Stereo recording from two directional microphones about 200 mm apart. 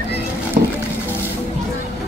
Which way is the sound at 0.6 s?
40° right (ahead or behind).